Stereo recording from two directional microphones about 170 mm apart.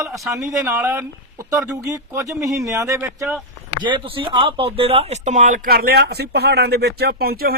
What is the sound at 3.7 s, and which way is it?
Speech, 25° right (ahead or behind).